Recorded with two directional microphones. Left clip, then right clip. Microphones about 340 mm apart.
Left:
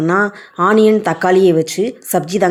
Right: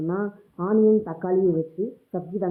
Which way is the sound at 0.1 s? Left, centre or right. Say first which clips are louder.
Left 14 dB; left.